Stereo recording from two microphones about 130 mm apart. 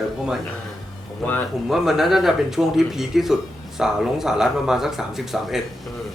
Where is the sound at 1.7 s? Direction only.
5° right (ahead or behind).